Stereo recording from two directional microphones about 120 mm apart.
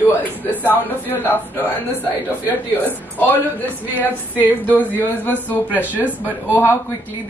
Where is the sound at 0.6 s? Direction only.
15° left (ahead or behind).